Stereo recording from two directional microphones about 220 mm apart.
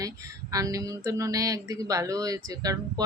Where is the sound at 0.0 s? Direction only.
15° right (ahead or behind).